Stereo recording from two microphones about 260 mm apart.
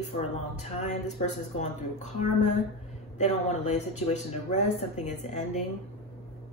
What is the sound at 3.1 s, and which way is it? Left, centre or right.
Speech, left.